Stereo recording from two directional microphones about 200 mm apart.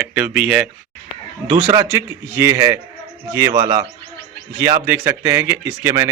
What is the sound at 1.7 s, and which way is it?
Speech, 20° right (ahead or behind).